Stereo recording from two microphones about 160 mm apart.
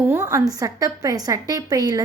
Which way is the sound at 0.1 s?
15° right (ahead or behind).